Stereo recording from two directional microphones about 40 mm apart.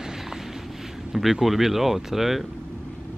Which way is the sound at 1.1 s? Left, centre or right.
Centre.